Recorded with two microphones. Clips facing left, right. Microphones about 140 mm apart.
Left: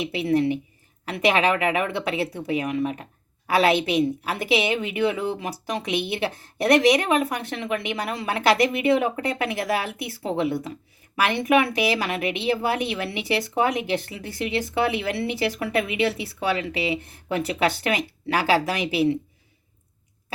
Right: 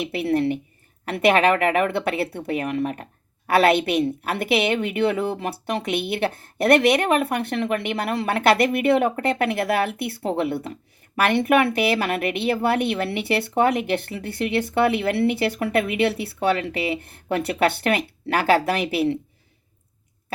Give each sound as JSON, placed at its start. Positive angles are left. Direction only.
{"t": 0.0, "sound": "a woman's voice", "side_deg": -55}